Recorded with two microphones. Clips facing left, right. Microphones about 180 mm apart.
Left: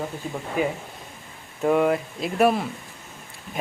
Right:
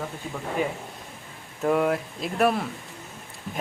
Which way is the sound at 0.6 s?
5° left (ahead or behind).